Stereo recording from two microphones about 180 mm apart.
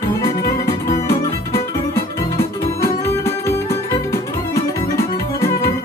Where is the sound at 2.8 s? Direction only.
15° left (ahead or behind).